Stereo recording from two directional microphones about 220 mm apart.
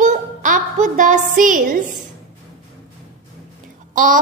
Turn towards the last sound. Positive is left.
turn(degrees=-35)  # may be behind; listen again after turning